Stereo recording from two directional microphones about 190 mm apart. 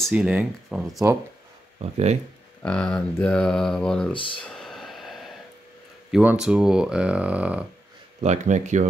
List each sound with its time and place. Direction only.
0.0 s speech: 5° right (ahead or behind)
1.8 s speech: 35° right (ahead or behind)
2.6 s speech: 5° left (ahead or behind)
4.1 s speech: 25° left (ahead or behind)
4.4 s a sound: centre (ahead or behind)
6.1 s speech: 5° right (ahead or behind)
8.2 s speech: 40° right (ahead or behind)